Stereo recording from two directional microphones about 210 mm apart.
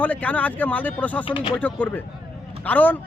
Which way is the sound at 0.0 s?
5° left (ahead or behind).